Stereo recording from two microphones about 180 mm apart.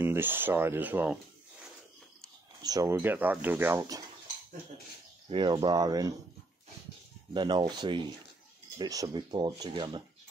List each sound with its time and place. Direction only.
0.0 s speech: 10° right (ahead or behind)
2.6 s speech: 20° right (ahead or behind)
5.3 s speech: 25° right (ahead or behind)
7.3 s speech: 25° right (ahead or behind)